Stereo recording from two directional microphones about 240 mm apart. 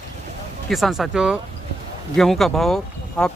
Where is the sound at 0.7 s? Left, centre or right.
Centre.